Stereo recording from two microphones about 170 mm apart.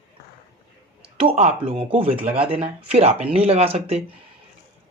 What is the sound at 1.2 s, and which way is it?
Speech, 35° right (ahead or behind).